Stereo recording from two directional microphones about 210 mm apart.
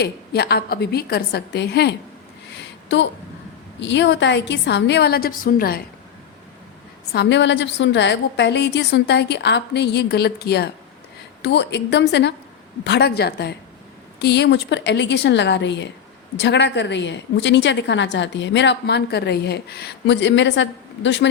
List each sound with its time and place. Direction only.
0.0 s a woman's voice: 50° left (ahead or behind)
2.6 s a sound: 55° left (ahead or behind)
3.8 s a woman's voice: 60° left (ahead or behind)
7.1 s a woman's voice: 55° left (ahead or behind)